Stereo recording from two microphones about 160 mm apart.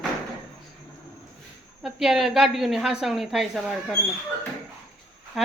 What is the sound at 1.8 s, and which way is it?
Speech, centre (ahead or behind).